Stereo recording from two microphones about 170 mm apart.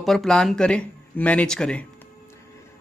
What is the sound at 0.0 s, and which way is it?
Speech, centre (ahead or behind).